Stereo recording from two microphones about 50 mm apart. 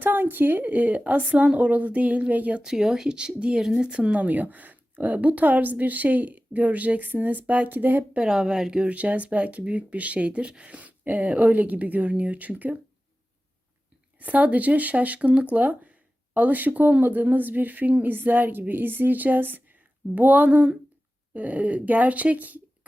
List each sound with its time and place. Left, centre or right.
0.0 s speech: right
2.6 s speech: centre; by 8.0 s right
8.3 s speech: centre
8.9 s speech: right
14.2 s speech: right